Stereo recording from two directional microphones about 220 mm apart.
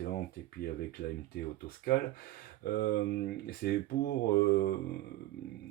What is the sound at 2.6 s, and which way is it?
Speech, 45° left (ahead or behind).